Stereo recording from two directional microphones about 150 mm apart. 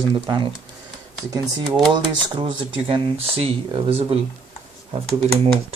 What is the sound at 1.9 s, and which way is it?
Speech, 30° right (ahead or behind).